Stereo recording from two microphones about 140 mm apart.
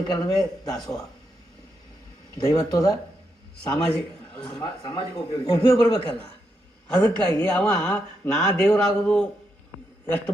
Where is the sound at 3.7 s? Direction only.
10° left (ahead or behind).